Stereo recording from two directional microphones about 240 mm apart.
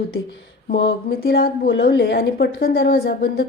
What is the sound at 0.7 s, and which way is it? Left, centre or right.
A woman's voice, left.